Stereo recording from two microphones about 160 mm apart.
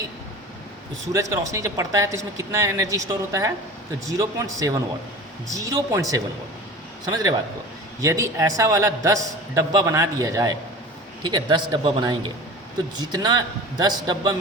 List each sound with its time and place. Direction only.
1.0 s a man's voice: 20° right (ahead or behind)